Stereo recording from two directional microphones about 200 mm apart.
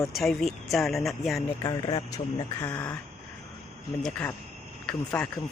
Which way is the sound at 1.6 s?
20° left (ahead or behind).